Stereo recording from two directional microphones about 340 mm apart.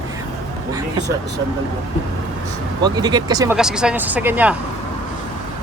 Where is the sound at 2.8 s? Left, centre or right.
Centre.